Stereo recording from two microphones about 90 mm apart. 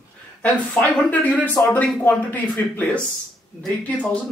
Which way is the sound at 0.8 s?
20° left (ahead or behind).